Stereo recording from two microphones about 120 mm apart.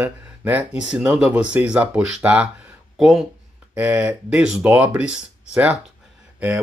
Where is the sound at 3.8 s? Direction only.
15° right (ahead or behind).